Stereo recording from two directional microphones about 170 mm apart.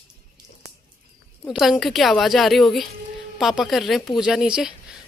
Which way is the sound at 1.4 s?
Centre (ahead or behind).